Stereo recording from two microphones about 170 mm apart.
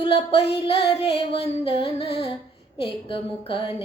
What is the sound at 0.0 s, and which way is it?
Music, 35° left (ahead or behind).